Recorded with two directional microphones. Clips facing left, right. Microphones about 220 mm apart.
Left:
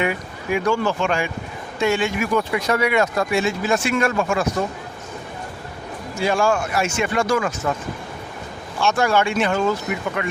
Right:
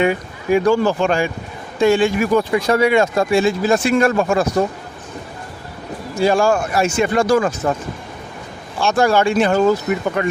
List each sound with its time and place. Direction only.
0.0 s speech: 35° right (ahead or behind)
6.1 s speech: 35° right (ahead or behind)
8.8 s speech: 35° right (ahead or behind)